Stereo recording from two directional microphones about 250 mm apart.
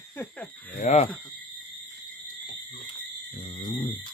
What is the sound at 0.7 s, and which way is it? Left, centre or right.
Speech, left.